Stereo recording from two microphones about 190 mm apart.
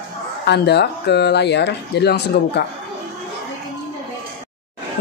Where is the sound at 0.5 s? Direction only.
60° left (ahead or behind).